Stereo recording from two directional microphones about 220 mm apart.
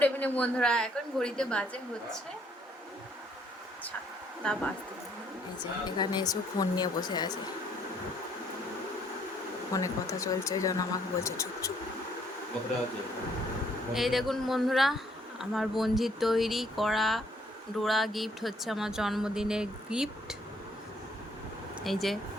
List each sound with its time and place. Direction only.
0.0 s speech: 5° left (ahead or behind)
4.4 s speech: 5° left (ahead or behind)
6.0 s speech: 20° left (ahead or behind)
9.7 s speech: 15° left (ahead or behind)
13.9 s speech: centre (ahead or behind)
21.8 s speech: centre (ahead or behind)